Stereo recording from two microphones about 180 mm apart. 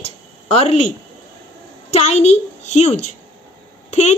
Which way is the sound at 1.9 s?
35° left (ahead or behind).